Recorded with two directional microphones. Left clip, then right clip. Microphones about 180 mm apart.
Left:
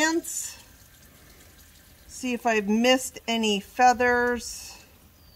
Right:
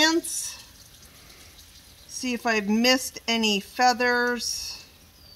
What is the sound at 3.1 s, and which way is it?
Speech, 50° left (ahead or behind).